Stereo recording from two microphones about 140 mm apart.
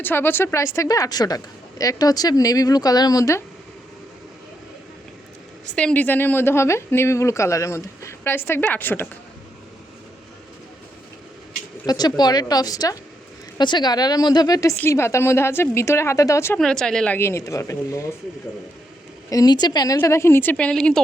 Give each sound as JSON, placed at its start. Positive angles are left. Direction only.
{"t": 0.0, "sound": "a woman's voice", "side_deg": 15}
{"t": 5.7, "sound": "speech", "side_deg": 10}
{"t": 11.9, "sound": "a woman's voice", "side_deg": 30}
{"t": 16.6, "sound": "speech", "side_deg": 5}
{"t": 17.2, "sound": "a woman's voice", "side_deg": 20}
{"t": 19.3, "sound": "a woman's voice", "side_deg": 30}
{"t": 20.0, "sound": "speech", "side_deg": 20}